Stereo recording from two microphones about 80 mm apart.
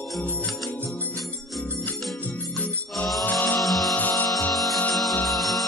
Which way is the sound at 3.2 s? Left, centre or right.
Left.